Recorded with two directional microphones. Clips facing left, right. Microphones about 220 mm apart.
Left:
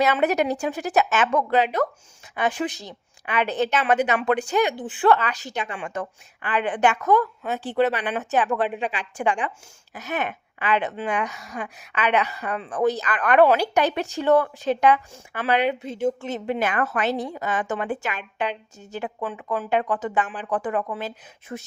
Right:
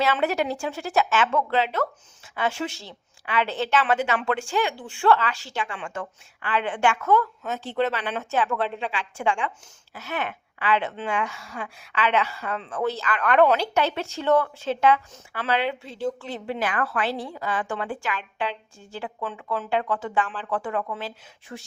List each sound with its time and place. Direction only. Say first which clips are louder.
0.2 s a woman's voice: left 3 dB; 20° left (ahead or behind)